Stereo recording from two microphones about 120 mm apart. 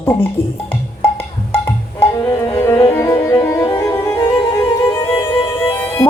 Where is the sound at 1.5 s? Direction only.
20° left (ahead or behind).